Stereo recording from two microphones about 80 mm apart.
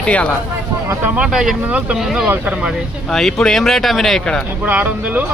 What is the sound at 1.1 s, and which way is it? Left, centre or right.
Speech, centre.